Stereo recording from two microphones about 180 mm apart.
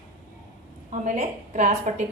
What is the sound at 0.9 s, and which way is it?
A woman's voice, 40° right (ahead or behind).